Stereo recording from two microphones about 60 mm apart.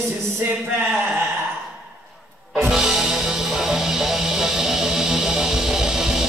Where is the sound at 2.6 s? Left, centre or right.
Centre.